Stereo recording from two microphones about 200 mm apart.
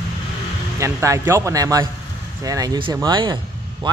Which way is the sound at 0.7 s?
15° right (ahead or behind).